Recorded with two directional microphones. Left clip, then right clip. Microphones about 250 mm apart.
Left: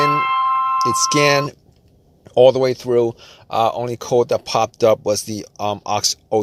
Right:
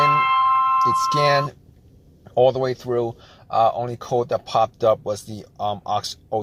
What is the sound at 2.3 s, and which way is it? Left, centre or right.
Speech, left.